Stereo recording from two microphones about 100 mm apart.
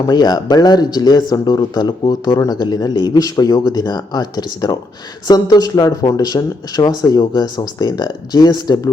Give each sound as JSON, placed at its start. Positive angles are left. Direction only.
{"t": 0.1, "sound": "speech", "side_deg": 45}